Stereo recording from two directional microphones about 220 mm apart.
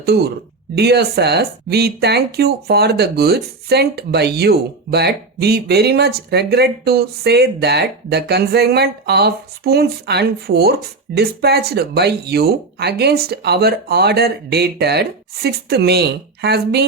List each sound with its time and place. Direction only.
0.0 s speech: 45° right (ahead or behind)